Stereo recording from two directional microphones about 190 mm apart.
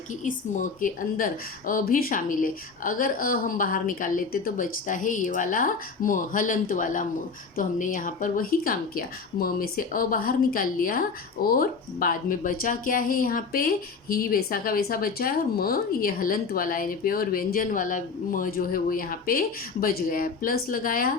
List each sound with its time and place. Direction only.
0.3 s speech: 45° left (ahead or behind)